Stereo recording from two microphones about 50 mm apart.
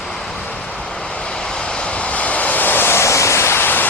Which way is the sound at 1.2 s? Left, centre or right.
Centre.